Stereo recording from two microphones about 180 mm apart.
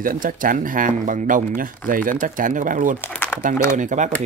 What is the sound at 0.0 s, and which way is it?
Speech, 50° right (ahead or behind).